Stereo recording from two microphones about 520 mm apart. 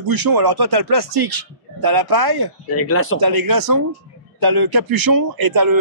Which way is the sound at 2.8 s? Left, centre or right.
Left.